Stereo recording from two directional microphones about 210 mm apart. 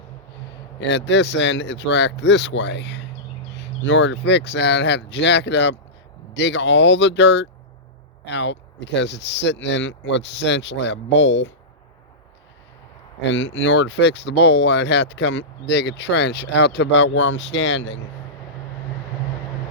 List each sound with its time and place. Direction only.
0.8 s speech: 55° left (ahead or behind)
13.2 s speech: 60° left (ahead or behind)